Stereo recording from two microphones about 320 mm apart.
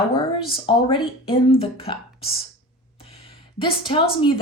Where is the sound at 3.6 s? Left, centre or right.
Centre.